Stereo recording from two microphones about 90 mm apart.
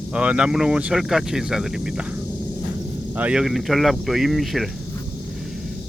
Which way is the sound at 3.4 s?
Centre (ahead or behind).